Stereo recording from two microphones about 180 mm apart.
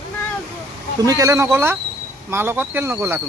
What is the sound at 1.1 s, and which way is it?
Speech, 20° right (ahead or behind).